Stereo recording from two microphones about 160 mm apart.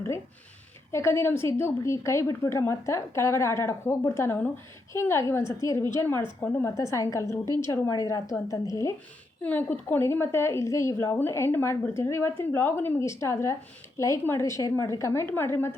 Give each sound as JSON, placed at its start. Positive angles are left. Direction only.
{"t": 0.9, "sound": "a woman's voice", "side_deg": 15}